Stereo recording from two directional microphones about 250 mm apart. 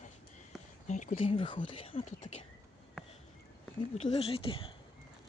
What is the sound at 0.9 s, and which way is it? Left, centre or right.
Speech, left.